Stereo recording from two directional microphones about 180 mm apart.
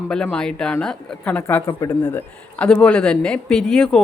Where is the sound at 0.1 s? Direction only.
5° left (ahead or behind).